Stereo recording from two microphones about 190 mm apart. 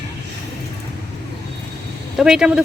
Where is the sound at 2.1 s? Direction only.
5° right (ahead or behind).